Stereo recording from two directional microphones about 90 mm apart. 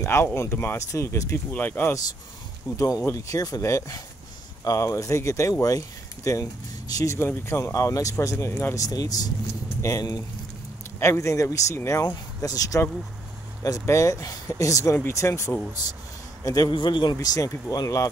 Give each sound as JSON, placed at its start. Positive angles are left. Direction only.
{"t": 0.0, "sound": "speech", "side_deg": 25}
{"t": 1.3, "sound": "speech", "side_deg": 20}
{"t": 3.1, "sound": "speech", "side_deg": 35}
{"t": 7.2, "sound": "speech", "side_deg": 25}
{"t": 12.0, "sound": "speech", "side_deg": 40}
{"t": 16.4, "sound": "a man's voice", "side_deg": 45}
{"t": 16.7, "sound": "a man's voice", "side_deg": 55}